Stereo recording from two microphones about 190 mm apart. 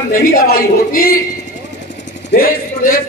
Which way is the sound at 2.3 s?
50° left (ahead or behind).